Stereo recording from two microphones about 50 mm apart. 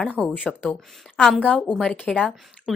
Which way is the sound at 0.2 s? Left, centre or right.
Left.